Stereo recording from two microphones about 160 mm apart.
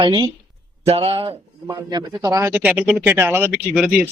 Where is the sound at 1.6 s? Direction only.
25° right (ahead or behind).